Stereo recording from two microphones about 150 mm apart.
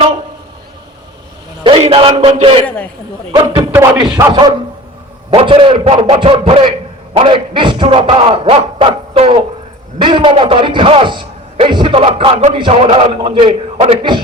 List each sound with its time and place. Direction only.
1.6 s speech: 40° right (ahead or behind)
2.6 s speech: 10° left (ahead or behind)
3.9 s speech: 30° right (ahead or behind)
13.1 s speech: 30° right (ahead or behind)